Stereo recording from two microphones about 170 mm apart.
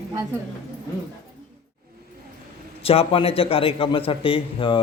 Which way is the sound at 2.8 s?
35° left (ahead or behind).